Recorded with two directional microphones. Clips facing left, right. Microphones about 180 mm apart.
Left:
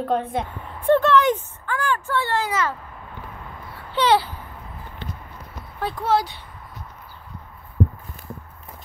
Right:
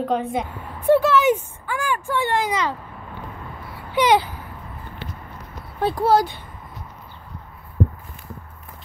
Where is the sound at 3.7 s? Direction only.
15° right (ahead or behind).